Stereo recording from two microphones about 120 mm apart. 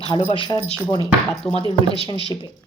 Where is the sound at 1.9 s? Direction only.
50° left (ahead or behind).